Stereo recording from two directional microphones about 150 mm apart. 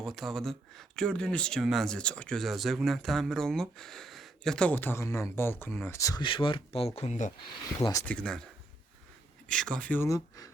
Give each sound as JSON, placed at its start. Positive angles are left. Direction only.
{"t": 0.0, "sound": "speech", "side_deg": 0}
{"t": 6.2, "sound": "speech", "side_deg": 35}
{"t": 7.8, "sound": "speech", "side_deg": 20}
{"t": 8.0, "sound": "speech", "side_deg": 5}
{"t": 9.5, "sound": "speech", "side_deg": 5}
{"t": 10.1, "sound": "speech", "side_deg": 25}